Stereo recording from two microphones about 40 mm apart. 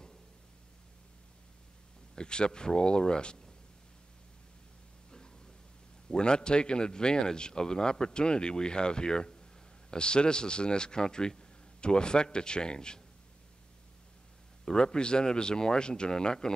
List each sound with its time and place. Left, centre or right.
2.1 s a man's voice: left
6.0 s a man's voice: left
14.6 s a man's voice: centre